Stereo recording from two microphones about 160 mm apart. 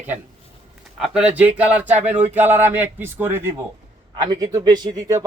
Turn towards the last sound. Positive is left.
turn(degrees=-25)  # may be behind; listen again after turning